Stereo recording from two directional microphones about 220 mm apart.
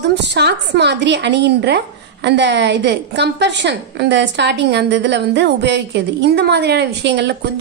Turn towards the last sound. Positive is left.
turn(degrees=-50)  # may be behind; listen again after turning